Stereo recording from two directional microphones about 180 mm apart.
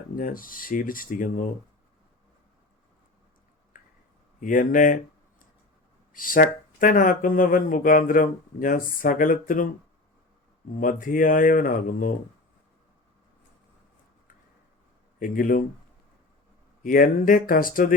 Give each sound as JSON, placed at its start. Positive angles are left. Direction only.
{"t": 0.2, "sound": "speech", "side_deg": 50}
{"t": 3.7, "sound": "a sound", "side_deg": 50}
{"t": 4.4, "sound": "speech", "side_deg": 50}
{"t": 6.1, "sound": "speech", "side_deg": 50}
{"t": 11.0, "sound": "speech", "side_deg": 50}
{"t": 15.2, "sound": "speech", "side_deg": 50}
{"t": 16.8, "sound": "speech", "side_deg": 50}